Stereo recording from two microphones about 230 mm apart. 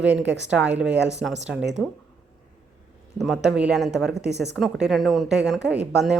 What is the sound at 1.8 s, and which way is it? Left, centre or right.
Speech, centre.